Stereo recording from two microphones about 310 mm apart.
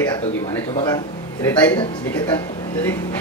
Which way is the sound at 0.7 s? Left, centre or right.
Centre.